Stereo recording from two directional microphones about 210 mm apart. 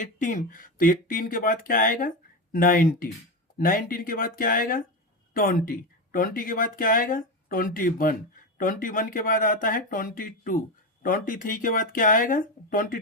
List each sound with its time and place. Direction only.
0.0 s speech: 40° left (ahead or behind)